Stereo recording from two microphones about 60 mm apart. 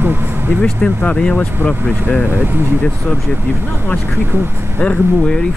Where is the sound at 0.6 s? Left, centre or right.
Centre.